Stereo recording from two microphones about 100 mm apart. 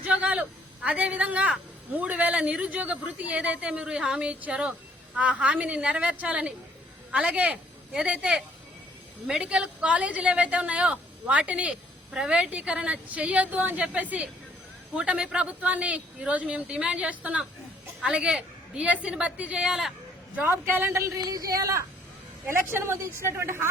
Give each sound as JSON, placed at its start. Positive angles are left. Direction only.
{"t": 0.0, "sound": "a woman's voice", "side_deg": -15}
{"t": 20.5, "sound": "a woman's voice", "side_deg": -20}
{"t": 21.2, "sound": "a woman's voice", "side_deg": -40}